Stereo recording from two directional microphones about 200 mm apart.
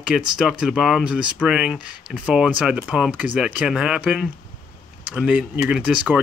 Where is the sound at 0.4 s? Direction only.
Centre (ahead or behind).